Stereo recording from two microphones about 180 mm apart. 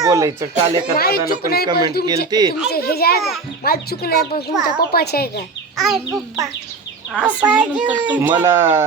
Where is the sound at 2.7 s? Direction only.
60° left (ahead or behind).